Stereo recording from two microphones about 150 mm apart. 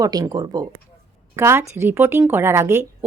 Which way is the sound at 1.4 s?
15° right (ahead or behind).